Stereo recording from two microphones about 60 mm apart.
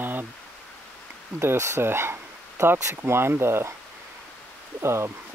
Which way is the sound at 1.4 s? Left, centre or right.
Right.